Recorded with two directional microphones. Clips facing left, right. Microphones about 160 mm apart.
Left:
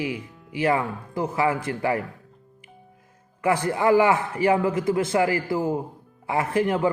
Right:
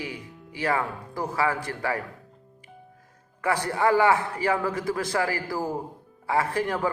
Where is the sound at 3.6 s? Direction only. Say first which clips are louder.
Left 2 dB; 20° left (ahead or behind).